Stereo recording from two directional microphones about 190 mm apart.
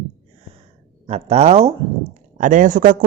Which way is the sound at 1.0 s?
35° right (ahead or behind).